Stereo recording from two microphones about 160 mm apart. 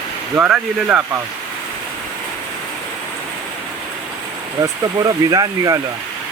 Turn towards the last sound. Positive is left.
turn(degrees=-25)  # may be behind; listen again after turning